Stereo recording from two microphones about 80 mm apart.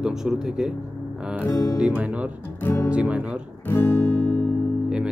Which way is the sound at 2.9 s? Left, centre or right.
Centre.